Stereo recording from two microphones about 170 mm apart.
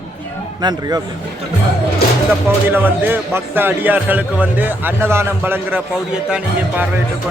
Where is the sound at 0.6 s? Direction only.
25° right (ahead or behind).